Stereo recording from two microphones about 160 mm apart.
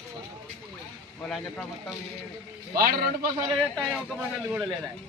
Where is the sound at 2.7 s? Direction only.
70° right (ahead or behind).